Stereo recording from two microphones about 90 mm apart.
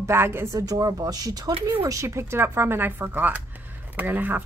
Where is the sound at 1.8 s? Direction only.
35° right (ahead or behind).